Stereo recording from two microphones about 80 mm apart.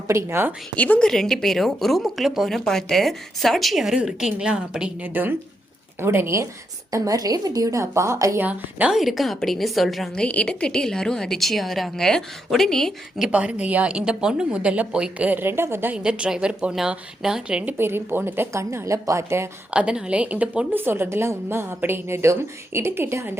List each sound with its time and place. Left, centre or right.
0.1 s a woman's voice: right
0.8 s a woman's voice: centre
1.0 s speech: centre
5.0 s a woman's voice: right
6.9 s a woman's voice: right
8.4 s a woman's voice: centre
8.9 s speech: centre
10.2 s a woman's voice: centre
13.2 s a woman's voice: centre
16.0 s a woman's voice: centre
17.7 s a woman's voice: right
19.7 s a woman's voice: centre; by 23.4 s right